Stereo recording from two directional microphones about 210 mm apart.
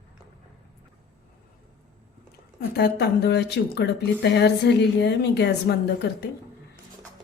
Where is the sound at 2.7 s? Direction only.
50° left (ahead or behind).